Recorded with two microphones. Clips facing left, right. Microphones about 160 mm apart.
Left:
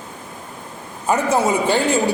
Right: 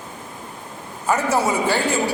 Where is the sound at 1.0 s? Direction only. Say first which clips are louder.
Left 2 dB; 20° left (ahead or behind).